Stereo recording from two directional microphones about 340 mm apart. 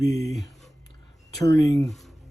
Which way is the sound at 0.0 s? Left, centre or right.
Centre.